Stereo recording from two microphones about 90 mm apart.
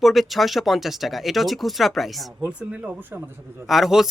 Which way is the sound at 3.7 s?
5° right (ahead or behind).